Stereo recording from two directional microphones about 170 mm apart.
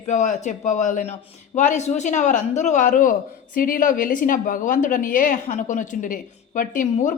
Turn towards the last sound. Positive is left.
turn(degrees=45)  # may be behind; listen again after turning